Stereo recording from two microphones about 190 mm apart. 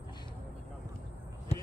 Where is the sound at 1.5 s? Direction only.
35° left (ahead or behind).